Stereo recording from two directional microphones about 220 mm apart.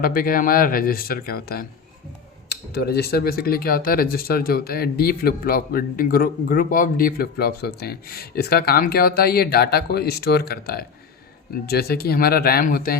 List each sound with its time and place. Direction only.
0.0 s speech: 40° left (ahead or behind)